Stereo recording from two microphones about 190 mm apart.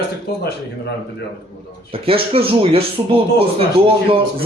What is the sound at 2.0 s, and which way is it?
Speech, 30° right (ahead or behind).